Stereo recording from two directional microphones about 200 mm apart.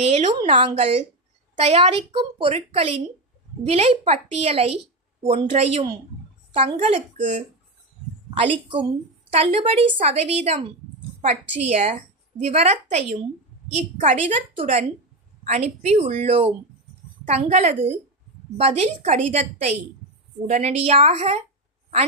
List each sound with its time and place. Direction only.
0.0 s a woman's voice: 35° right (ahead or behind)
9.3 s a woman's voice: 30° right (ahead or behind)